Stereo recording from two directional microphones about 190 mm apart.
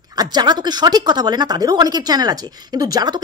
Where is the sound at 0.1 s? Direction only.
20° right (ahead or behind).